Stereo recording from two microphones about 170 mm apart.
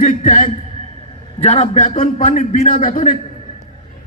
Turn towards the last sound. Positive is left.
turn(degrees=55)  # may be behind; listen again after turning